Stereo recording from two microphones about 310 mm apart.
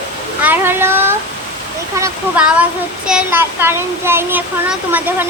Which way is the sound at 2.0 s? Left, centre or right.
Centre.